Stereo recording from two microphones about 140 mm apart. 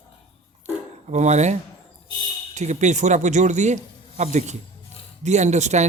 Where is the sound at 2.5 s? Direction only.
55° right (ahead or behind).